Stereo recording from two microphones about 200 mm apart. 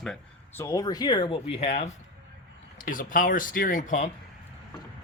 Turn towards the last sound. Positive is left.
turn(degrees=40)  # may be behind; listen again after turning